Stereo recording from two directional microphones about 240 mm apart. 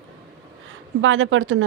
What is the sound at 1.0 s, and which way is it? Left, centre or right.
Speech, right.